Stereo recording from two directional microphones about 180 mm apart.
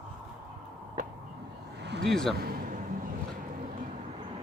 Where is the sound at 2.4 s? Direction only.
60° right (ahead or behind).